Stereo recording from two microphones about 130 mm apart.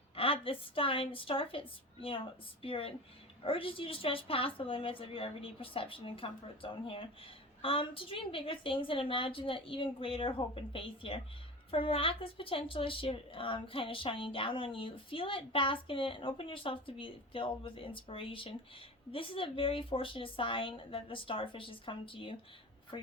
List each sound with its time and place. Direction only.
0.2 s a woman's voice: 45° left (ahead or behind)